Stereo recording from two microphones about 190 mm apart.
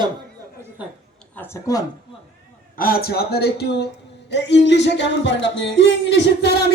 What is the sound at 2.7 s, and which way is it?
Music, 50° left (ahead or behind).